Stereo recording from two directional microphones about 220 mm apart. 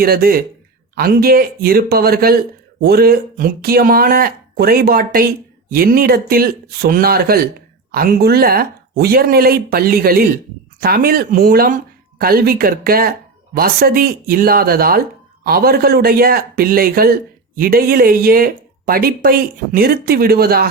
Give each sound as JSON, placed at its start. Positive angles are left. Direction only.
{"t": 0.0, "sound": "speech", "side_deg": -45}